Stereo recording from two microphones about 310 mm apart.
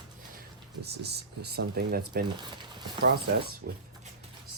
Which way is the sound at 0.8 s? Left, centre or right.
Right.